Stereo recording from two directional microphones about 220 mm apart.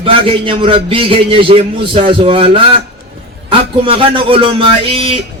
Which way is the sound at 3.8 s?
25° right (ahead or behind).